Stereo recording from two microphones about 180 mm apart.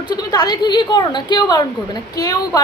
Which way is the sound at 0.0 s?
25° left (ahead or behind).